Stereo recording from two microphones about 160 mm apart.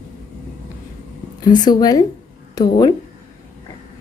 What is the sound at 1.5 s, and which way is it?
A woman's voice, 25° left (ahead or behind).